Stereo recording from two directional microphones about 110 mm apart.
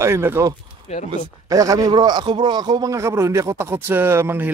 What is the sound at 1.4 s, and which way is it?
Speech, 30° right (ahead or behind).